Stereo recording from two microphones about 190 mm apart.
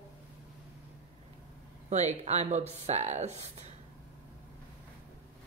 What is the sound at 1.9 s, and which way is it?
Speech, 35° right (ahead or behind).